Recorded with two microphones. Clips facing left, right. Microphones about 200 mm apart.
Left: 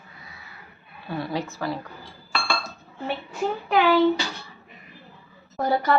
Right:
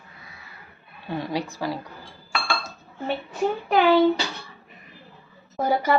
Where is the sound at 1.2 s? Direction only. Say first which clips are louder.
Even; 15° right (ahead or behind).